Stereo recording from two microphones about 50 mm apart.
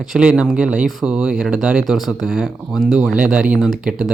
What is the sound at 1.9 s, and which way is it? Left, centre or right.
Speech, centre.